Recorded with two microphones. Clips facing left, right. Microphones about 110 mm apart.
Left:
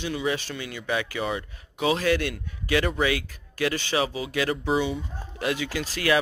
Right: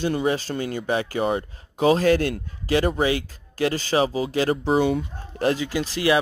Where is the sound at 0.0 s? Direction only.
45° right (ahead or behind).